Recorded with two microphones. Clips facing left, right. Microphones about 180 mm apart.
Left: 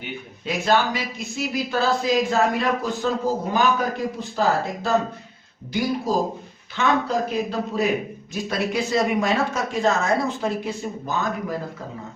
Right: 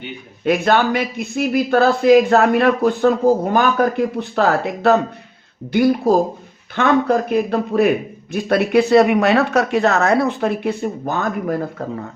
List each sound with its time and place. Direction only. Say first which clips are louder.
0.4 s a man's voice: right 6 dB; 60° right (ahead or behind)